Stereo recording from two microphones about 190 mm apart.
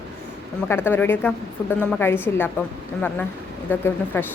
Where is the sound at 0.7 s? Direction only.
10° left (ahead or behind).